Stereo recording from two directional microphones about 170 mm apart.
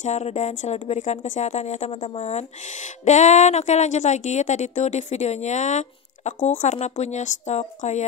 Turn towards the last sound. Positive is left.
turn(degrees=45)  # may be behind; listen again after turning